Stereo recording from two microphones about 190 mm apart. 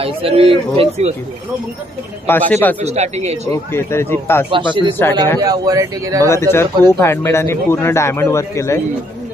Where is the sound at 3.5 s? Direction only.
15° left (ahead or behind).